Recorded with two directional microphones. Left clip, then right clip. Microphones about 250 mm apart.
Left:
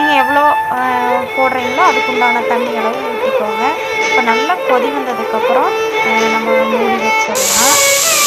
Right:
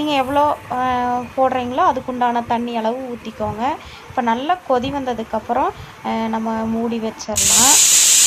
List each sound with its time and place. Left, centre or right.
0.1 s music: centre
1.8 s speech: centre